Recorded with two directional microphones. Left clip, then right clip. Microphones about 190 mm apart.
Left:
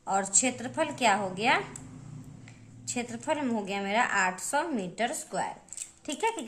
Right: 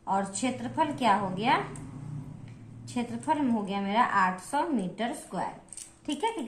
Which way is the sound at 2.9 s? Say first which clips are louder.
Right 2 dB; 50° left (ahead or behind).